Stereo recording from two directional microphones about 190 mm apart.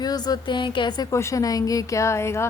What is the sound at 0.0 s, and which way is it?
A woman's voice, 20° left (ahead or behind).